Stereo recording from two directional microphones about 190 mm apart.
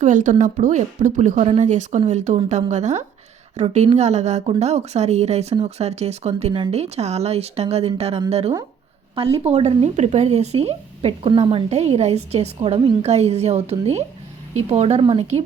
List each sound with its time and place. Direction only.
0.0 s speech: 40° right (ahead or behind)